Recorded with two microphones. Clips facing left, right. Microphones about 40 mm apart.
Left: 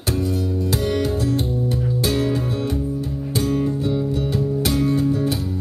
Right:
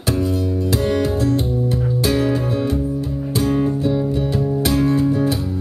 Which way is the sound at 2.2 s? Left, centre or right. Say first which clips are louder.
Right 3 dB; right.